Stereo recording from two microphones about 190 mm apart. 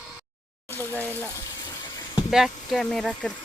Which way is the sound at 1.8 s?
20° left (ahead or behind).